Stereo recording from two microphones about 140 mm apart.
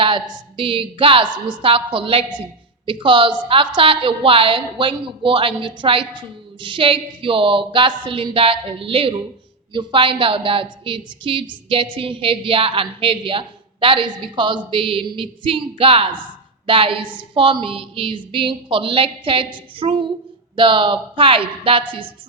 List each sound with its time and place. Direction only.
0.0 s a woman's voice: 35° right (ahead or behind)